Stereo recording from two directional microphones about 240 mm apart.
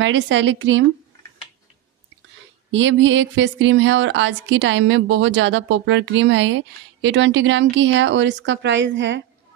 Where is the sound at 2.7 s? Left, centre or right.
Right.